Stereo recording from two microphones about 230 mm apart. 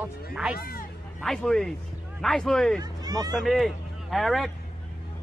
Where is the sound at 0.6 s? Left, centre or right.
Left.